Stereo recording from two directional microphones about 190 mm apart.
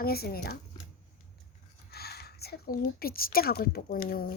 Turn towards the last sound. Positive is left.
turn(degrees=50)  # may be behind; listen again after turning